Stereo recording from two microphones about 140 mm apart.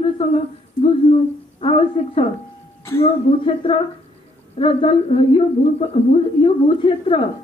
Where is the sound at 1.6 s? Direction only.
40° left (ahead or behind).